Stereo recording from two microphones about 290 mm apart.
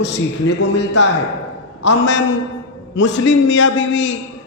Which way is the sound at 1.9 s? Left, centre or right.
Left.